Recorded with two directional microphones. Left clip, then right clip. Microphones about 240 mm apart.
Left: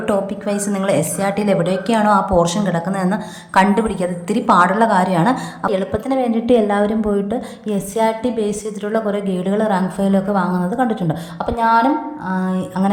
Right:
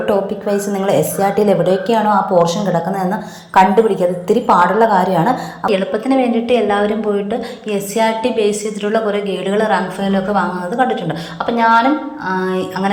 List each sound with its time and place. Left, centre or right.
0.0 s a woman's voice: centre
5.6 s a woman's voice: left